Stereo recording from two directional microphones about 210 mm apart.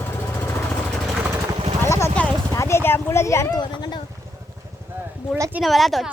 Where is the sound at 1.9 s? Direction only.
15° left (ahead or behind).